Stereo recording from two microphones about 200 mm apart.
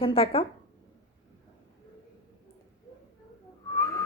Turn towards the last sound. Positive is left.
turn(degrees=15)  # may be behind; listen again after turning